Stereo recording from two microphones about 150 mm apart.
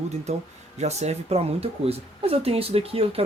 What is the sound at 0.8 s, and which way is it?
Speech, 45° right (ahead or behind).